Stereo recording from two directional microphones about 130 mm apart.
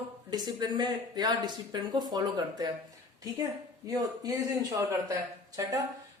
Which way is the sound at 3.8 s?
30° right (ahead or behind).